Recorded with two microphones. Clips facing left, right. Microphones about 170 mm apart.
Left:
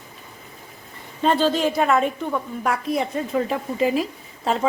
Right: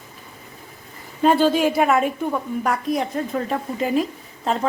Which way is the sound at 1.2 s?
10° right (ahead or behind).